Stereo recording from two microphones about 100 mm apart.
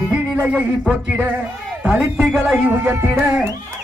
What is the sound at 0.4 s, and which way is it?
Speech, 10° right (ahead or behind).